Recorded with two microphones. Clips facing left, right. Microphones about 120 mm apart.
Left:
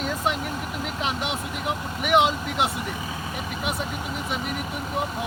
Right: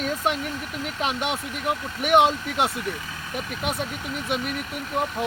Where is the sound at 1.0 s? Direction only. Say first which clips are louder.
Right 3 dB; 50° right (ahead or behind).